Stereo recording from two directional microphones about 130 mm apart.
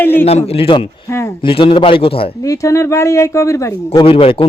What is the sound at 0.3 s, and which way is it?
Speech, 50° left (ahead or behind).